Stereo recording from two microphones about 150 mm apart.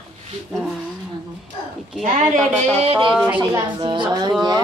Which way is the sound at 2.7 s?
40° right (ahead or behind).